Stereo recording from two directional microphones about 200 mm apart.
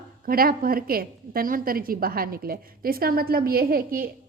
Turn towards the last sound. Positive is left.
turn(degrees=-45)  # may be behind; listen again after turning